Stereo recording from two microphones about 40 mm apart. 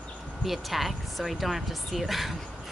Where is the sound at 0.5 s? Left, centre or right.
Centre.